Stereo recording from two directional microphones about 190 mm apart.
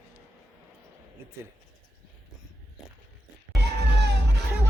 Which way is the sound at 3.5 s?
60° right (ahead or behind).